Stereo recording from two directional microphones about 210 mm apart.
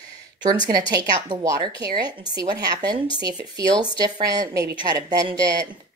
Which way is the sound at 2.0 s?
20° right (ahead or behind).